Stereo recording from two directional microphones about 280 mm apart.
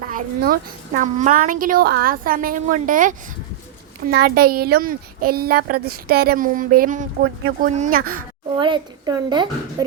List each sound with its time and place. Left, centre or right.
0.1 s a woman's voice: right; by 9.8 s centre